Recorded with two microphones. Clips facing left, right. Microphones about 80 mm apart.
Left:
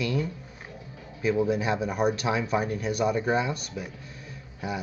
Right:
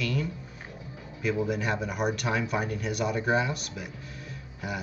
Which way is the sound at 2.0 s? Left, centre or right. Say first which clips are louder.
Left 1 dB; centre.